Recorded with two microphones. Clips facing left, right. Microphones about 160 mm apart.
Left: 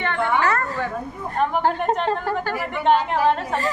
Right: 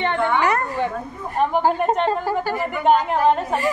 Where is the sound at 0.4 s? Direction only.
15° right (ahead or behind).